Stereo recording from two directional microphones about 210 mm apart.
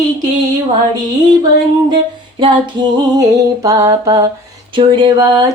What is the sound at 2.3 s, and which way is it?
Music, 25° right (ahead or behind).